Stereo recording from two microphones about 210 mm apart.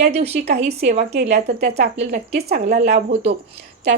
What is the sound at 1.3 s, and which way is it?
A woman's voice, 50° right (ahead or behind).